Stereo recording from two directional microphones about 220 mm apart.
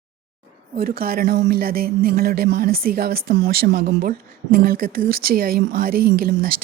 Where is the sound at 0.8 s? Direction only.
40° right (ahead or behind).